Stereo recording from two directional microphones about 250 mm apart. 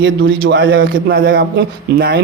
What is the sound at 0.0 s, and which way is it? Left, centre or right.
A man's voice, right.